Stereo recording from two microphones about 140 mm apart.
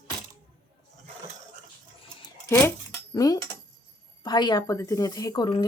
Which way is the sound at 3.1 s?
25° left (ahead or behind).